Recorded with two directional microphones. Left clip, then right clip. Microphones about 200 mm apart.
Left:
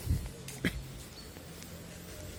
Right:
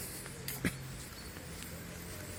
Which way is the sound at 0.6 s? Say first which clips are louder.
Left 3 dB; 20° left (ahead or behind).